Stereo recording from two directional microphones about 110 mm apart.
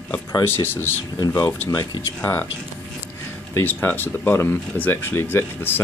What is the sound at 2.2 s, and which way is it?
Speech, 20° left (ahead or behind).